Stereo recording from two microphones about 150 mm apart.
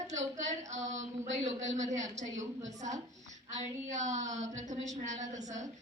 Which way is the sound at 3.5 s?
55° right (ahead or behind).